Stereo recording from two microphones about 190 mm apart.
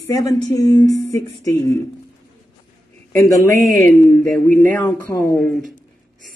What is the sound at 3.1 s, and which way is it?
Speech, 15° left (ahead or behind).